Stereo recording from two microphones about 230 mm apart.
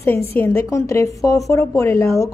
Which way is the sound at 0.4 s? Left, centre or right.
Centre.